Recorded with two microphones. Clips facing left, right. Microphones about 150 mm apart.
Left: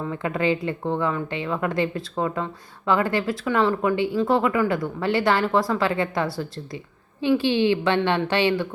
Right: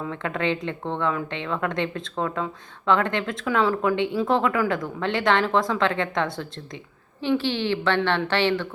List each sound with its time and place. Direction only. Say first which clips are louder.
0.0 s a woman's voice: left 2 dB; 5° left (ahead or behind)